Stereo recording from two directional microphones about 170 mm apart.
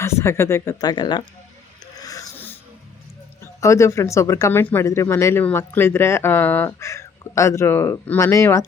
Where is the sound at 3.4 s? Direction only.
15° left (ahead or behind).